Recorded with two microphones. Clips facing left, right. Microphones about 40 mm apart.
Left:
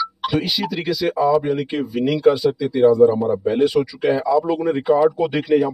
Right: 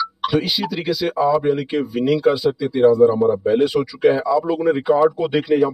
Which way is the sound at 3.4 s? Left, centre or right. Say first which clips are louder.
Even; centre.